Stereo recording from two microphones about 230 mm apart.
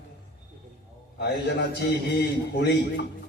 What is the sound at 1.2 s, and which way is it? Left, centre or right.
A man's voice, left.